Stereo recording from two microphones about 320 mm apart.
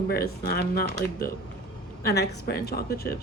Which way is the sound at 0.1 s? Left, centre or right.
Left.